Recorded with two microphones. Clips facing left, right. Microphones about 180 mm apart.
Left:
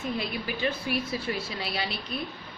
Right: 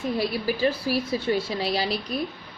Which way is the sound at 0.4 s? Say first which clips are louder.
Right 6 dB; 35° right (ahead or behind).